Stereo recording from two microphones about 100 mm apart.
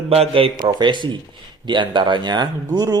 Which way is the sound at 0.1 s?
75° right (ahead or behind).